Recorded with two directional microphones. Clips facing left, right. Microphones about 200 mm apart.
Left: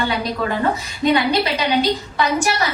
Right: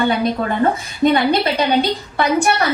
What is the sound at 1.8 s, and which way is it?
Speech, 55° right (ahead or behind).